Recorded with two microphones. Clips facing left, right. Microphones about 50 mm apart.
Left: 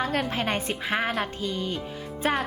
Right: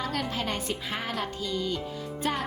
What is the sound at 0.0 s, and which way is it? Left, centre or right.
A woman's voice, left.